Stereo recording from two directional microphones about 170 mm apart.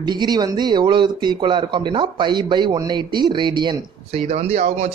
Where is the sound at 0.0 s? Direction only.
25° right (ahead or behind).